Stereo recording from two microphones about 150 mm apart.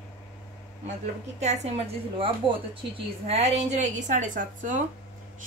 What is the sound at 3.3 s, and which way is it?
A woman's voice, 45° right (ahead or behind).